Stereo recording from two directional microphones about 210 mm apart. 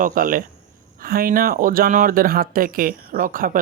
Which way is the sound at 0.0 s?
40° right (ahead or behind).